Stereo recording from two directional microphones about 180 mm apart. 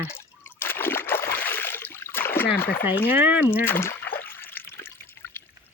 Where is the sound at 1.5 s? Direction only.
10° left (ahead or behind).